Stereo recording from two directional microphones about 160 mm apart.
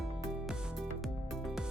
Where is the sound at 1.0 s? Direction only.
Centre (ahead or behind).